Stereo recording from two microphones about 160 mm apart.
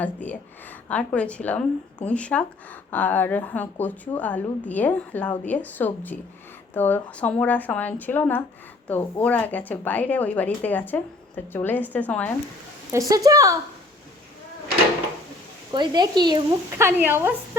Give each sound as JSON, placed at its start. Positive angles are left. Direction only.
{"t": 0.0, "sound": "a woman's voice", "side_deg": 10}
{"t": 12.9, "sound": "speech", "side_deg": -20}
{"t": 15.7, "sound": "speech", "side_deg": -25}